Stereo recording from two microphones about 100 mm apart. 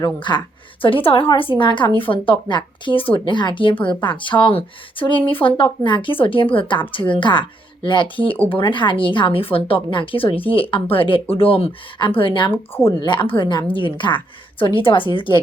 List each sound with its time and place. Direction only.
0.0 s a woman's voice: 50° left (ahead or behind)